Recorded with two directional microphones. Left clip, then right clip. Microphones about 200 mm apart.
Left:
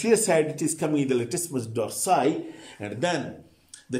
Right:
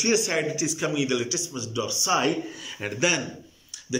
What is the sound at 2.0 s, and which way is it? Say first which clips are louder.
A man's voice: left 1 dB; 25° left (ahead or behind).